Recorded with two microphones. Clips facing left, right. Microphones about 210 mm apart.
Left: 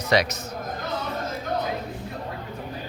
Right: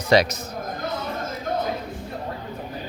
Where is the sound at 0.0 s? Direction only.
30° right (ahead or behind).